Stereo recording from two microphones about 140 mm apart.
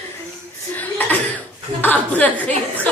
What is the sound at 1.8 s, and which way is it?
A woman's voice, 10° left (ahead or behind).